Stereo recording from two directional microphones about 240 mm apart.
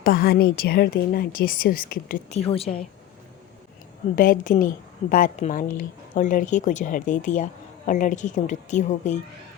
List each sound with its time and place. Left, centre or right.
0.0 s a woman's voice: left
2.4 s a woman's voice: left
4.1 s a woman's voice: left